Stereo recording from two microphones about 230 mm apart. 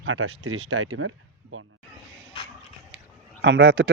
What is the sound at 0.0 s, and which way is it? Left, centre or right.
Speech, right.